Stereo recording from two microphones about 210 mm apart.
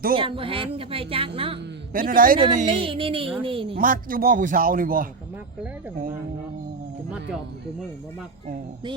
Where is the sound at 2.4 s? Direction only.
25° right (ahead or behind).